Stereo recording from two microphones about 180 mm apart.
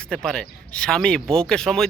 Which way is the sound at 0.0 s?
5° left (ahead or behind).